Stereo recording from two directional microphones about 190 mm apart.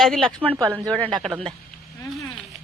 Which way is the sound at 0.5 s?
20° right (ahead or behind).